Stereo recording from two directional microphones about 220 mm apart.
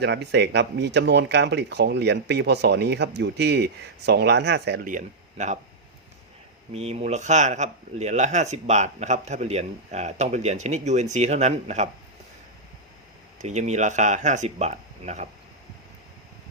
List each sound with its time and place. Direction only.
0.0 s speech: 50° right (ahead or behind); by 5.5 s 35° right (ahead or behind)
6.7 s speech: 30° right (ahead or behind)
13.4 s speech: 30° right (ahead or behind)